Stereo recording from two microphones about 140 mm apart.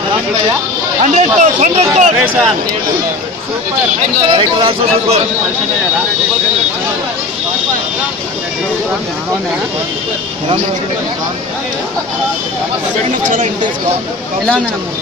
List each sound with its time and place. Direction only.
1.0 s speech: 55° right (ahead or behind)
4.3 s speech: 35° right (ahead or behind)